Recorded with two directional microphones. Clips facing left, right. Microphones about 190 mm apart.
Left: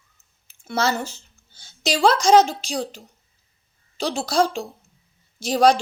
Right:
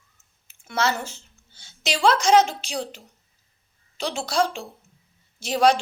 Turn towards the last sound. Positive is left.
turn(degrees=35)  # may be behind; listen again after turning